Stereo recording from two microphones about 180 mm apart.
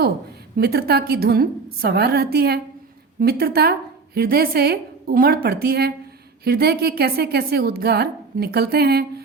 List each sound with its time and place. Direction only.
0.5 s a woman's voice: 60° right (ahead or behind)